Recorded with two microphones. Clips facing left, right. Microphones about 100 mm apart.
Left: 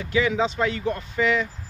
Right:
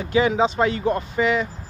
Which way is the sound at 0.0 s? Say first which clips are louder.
Right 4 dB; 30° right (ahead or behind).